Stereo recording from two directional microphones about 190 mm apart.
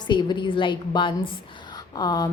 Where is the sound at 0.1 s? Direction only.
25° left (ahead or behind).